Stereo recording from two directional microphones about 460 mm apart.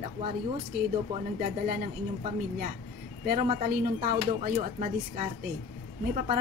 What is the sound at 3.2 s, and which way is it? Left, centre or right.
Speech, centre.